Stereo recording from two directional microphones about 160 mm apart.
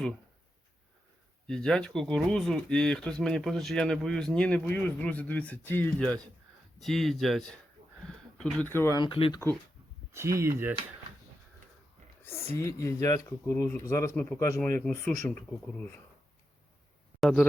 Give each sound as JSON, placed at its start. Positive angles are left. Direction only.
{"t": 1.5, "sound": "speech", "side_deg": 5}
{"t": 8.0, "sound": "a sound", "side_deg": 5}
{"t": 8.7, "sound": "speech", "side_deg": 15}
{"t": 9.0, "sound": "speech", "side_deg": 35}
{"t": 10.1, "sound": "speech", "side_deg": -20}
{"t": 12.2, "sound": "a woman's voice", "side_deg": 15}
{"t": 17.2, "sound": "speech", "side_deg": 5}